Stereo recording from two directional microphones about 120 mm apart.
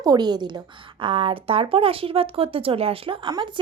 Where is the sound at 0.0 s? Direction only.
35° right (ahead or behind).